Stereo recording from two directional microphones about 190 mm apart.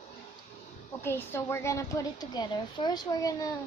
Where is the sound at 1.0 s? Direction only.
10° left (ahead or behind).